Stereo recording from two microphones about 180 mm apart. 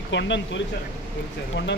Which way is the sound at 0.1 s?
85° left.